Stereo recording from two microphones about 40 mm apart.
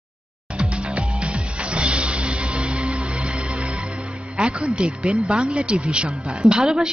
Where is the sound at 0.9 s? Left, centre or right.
Right.